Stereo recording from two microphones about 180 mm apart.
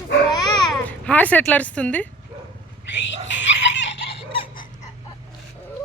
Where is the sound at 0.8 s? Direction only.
10° left (ahead or behind).